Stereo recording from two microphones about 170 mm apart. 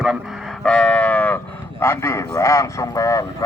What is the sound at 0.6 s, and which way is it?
Livestock, 5° left (ahead or behind).